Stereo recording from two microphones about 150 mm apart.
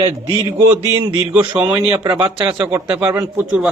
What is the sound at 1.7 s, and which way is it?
Speech, 15° right (ahead or behind).